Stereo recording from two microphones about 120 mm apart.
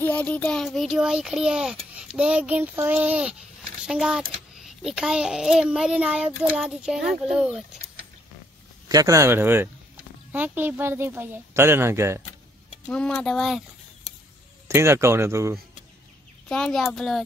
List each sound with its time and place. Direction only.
0.0 s a child's voice: 15° left (ahead or behind); by 7.8 s 5° right (ahead or behind)
8.8 s speech: 30° right (ahead or behind)
12.8 s a child's voice: 5° left (ahead or behind)
14.7 s speech: 20° right (ahead or behind)
16.4 s a child's voice: 5° left (ahead or behind)